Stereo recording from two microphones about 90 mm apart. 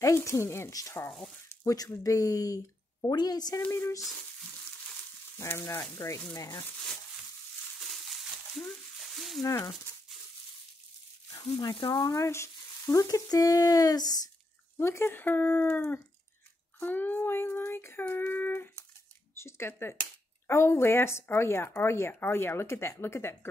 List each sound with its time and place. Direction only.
0.0 s sizzle: 35° left (ahead or behind)
1.6 s speech: 40° left (ahead or behind)
2.0 s sizzle: 40° left (ahead or behind)
3.7 s speech: 30° left (ahead or behind)
5.4 s sizzle: 30° left (ahead or behind)
8.1 s a sound: centre (ahead or behind)
9.4 s sizzle: 35° left (ahead or behind)
11.3 s speech: 45° left (ahead or behind)
11.7 s speech: 55° left (ahead or behind)
12.1 s sizzle: 30° left (ahead or behind)
14.8 s speech: 30° left (ahead or behind)